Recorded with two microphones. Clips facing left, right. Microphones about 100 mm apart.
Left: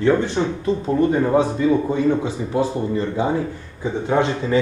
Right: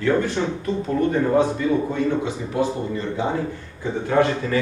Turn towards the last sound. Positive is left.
turn(degrees=20)  # may be behind; listen again after turning